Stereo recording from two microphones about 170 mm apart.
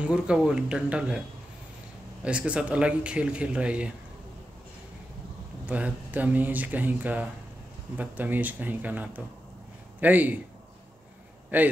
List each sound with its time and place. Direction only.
0.0 s speech: 5° right (ahead or behind)
2.2 s a man's voice: 5° right (ahead or behind)
5.7 s a man's voice: 10° right (ahead or behind)
11.5 s a man's voice: 10° right (ahead or behind)